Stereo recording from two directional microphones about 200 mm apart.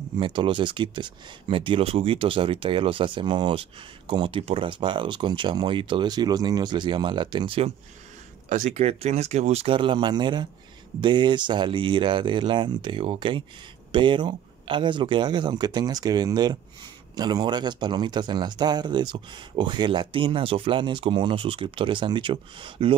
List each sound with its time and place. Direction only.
0.2 s speech: 25° right (ahead or behind)